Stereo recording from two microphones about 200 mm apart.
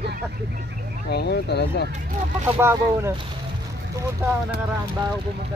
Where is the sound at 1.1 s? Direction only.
55° left (ahead or behind).